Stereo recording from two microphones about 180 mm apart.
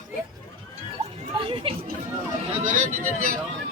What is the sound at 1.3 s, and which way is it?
Speech, 30° right (ahead or behind).